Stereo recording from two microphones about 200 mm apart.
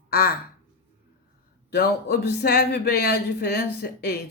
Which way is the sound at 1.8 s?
50° left (ahead or behind).